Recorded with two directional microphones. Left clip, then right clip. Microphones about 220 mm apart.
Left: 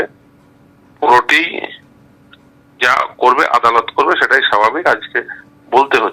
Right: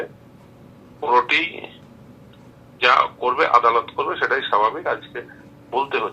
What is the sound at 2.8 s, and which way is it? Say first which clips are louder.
Speech: left 4 dB; 35° left (ahead or behind).